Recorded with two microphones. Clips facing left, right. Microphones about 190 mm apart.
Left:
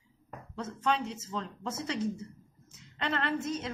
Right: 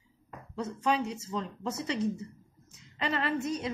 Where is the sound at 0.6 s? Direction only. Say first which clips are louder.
Right 2 dB; 5° right (ahead or behind).